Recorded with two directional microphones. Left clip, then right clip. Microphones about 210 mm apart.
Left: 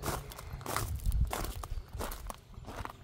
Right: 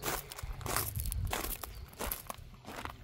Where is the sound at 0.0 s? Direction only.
Centre (ahead or behind).